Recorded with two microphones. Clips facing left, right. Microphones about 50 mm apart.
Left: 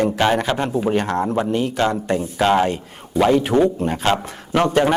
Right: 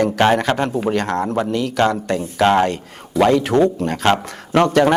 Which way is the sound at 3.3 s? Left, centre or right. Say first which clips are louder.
Right 1 dB; right.